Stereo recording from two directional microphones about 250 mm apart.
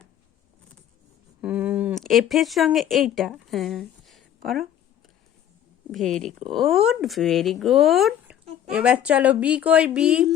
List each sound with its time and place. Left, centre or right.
1.4 s speech: centre
5.9 s speech: centre